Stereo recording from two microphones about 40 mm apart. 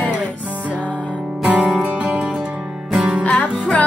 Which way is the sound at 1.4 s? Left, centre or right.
Right.